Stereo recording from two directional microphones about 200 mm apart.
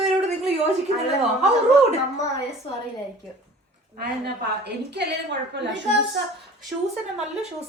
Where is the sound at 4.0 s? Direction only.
55° right (ahead or behind).